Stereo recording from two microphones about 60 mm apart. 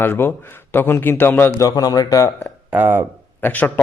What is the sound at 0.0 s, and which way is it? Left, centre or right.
A man's voice, left.